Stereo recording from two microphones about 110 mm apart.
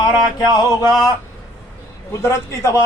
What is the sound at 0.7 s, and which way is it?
Speech, 35° left (ahead or behind).